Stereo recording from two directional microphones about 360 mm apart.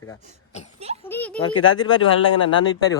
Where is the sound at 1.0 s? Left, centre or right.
Centre.